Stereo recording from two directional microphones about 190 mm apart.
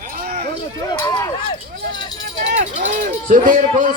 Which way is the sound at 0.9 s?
15° left (ahead or behind).